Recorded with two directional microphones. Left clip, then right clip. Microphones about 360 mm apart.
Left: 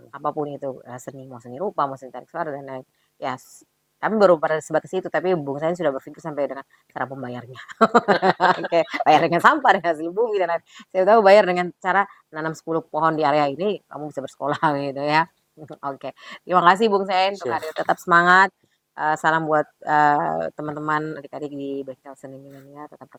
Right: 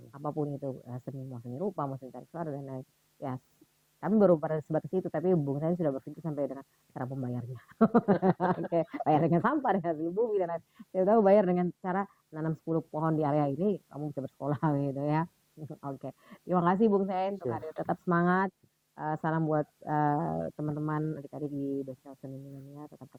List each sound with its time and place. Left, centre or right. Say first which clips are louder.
0.1 s a man's voice: left 9 dB; centre
21.5 s speech: left 3 dB; left
21.8 s speech: left 8 dB; centre